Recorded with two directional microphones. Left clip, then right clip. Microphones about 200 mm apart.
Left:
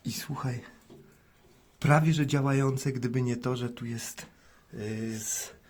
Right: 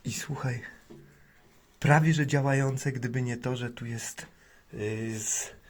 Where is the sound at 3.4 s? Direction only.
30° left (ahead or behind).